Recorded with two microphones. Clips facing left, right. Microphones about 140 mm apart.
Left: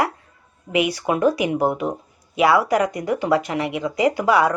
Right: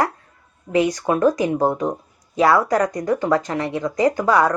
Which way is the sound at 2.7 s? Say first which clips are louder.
Right 1 dB; 10° left (ahead or behind).